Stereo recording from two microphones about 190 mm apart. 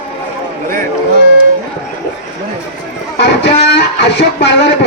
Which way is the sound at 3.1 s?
65° left (ahead or behind).